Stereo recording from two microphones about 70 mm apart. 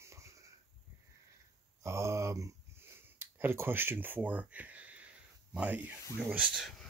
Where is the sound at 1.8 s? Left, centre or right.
Right.